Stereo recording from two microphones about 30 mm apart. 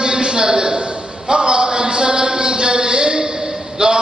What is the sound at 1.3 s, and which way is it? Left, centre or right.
Music, right.